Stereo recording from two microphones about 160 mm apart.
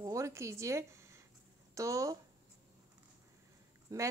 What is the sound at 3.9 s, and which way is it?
Speech, 20° right (ahead or behind).